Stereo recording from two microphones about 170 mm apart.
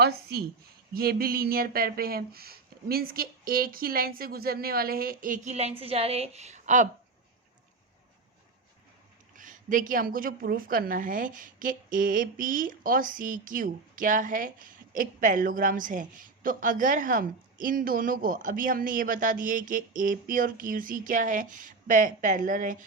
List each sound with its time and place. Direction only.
0.0 s a woman's voice: 70° right (ahead or behind)
0.9 s a sound: 60° right (ahead or behind); by 6.8 s 45° right (ahead or behind)
9.3 s a woman's voice: 50° right (ahead or behind)